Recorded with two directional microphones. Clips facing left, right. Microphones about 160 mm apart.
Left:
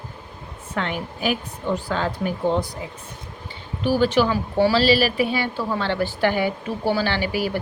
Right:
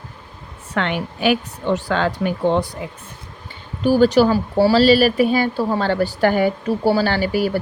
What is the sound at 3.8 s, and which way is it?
Speech, 45° right (ahead or behind).